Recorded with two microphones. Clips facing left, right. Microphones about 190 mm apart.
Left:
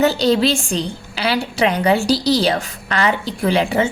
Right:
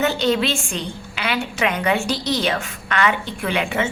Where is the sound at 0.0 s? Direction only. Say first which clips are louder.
Left 4 dB; 35° left (ahead or behind).